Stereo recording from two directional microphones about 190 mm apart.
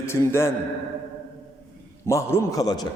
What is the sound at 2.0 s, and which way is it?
Speech, 15° left (ahead or behind).